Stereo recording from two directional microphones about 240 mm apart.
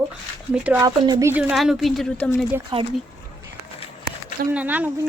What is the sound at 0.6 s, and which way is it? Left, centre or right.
A woman's voice, centre.